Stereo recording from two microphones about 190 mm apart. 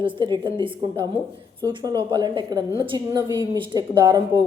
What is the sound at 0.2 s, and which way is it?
Speech, 25° right (ahead or behind).